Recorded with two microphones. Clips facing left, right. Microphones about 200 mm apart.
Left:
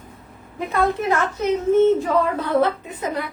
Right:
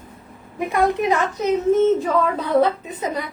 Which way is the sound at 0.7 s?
15° right (ahead or behind).